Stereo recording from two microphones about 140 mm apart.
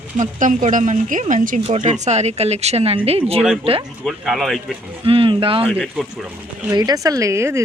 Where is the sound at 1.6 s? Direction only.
50° right (ahead or behind).